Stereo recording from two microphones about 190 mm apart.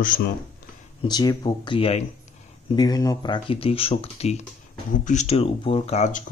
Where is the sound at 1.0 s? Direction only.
20° left (ahead or behind).